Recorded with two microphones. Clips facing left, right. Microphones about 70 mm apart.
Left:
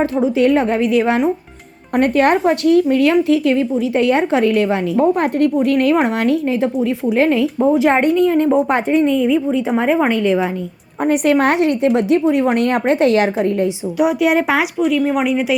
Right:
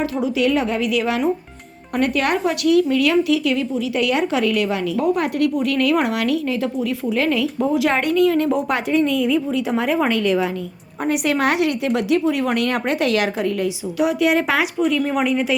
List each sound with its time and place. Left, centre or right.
0.0 s speech: left
11.0 s speech: left; by 14.6 s centre
14.8 s speech: centre